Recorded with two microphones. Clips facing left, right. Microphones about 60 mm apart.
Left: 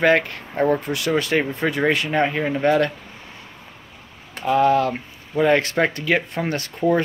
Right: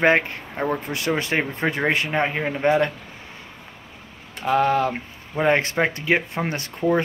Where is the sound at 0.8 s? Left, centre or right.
Right.